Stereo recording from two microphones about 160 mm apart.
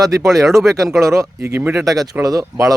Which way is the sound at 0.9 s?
20° right (ahead or behind).